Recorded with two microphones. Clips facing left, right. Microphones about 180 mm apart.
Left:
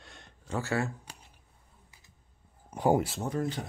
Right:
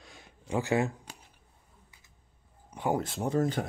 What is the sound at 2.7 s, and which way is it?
Speech, 45° left (ahead or behind).